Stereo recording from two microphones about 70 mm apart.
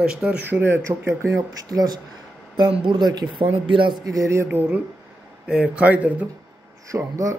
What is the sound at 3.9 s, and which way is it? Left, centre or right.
Mantra, right.